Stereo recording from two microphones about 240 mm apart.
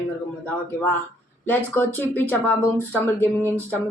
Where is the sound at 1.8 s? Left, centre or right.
Centre.